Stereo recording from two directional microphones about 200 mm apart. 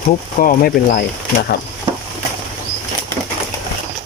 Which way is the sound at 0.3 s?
40° left (ahead or behind).